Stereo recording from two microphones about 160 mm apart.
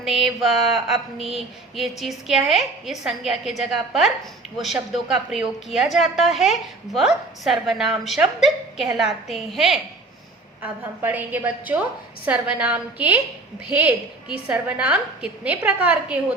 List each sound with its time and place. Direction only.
0.0 s a woman's voice: centre (ahead or behind)